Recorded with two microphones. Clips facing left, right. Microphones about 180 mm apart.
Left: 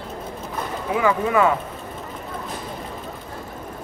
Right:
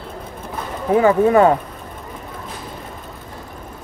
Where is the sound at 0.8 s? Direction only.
40° right (ahead or behind).